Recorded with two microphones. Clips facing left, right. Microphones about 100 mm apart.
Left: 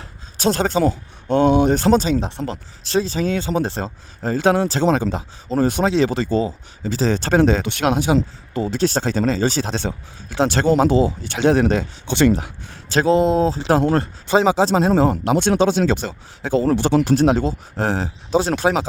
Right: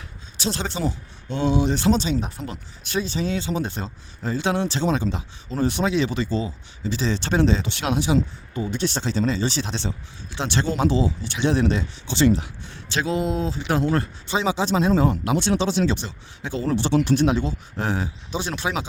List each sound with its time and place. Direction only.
0.0 s a sound: 45° left (ahead or behind)
0.8 s speech: 55° left (ahead or behind)
2.2 s speech: 30° left (ahead or behind)
3.2 s speech: 50° left (ahead or behind)
3.6 s speech: 35° left (ahead or behind)
6.2 s speech: 55° left (ahead or behind)
6.9 s speech: 40° left (ahead or behind)
8.5 s speech: 75° left (ahead or behind)
8.9 s speech: 45° left (ahead or behind)